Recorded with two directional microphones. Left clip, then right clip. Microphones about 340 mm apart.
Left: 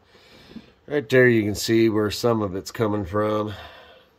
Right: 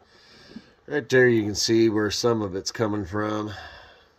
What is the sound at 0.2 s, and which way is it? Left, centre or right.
Speech, centre.